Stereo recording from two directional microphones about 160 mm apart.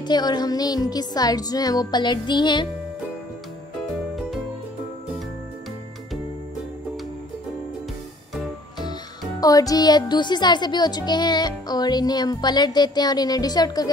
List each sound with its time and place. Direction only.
0.0 s a woman's voice: 25° left (ahead or behind)
9.4 s a woman's voice: 20° left (ahead or behind)